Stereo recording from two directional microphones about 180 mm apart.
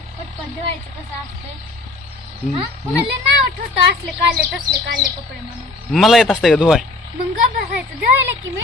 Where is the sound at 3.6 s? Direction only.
55° right (ahead or behind).